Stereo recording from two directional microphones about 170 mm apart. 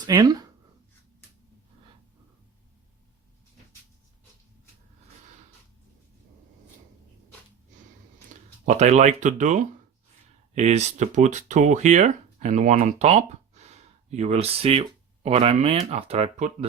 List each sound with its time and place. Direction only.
0.0 s speech: 25° right (ahead or behind)
8.3 s speech: 45° right (ahead or behind)